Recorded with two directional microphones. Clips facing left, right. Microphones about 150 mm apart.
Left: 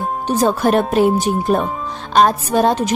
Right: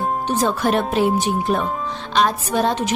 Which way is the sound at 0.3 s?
45° left (ahead or behind).